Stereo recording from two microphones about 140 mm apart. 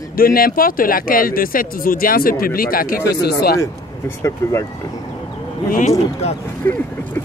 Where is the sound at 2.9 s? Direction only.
25° left (ahead or behind).